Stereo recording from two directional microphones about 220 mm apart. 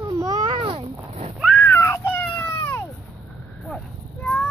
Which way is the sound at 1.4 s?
5° left (ahead or behind).